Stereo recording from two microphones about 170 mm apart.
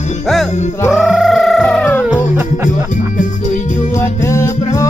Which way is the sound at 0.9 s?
Centre (ahead or behind).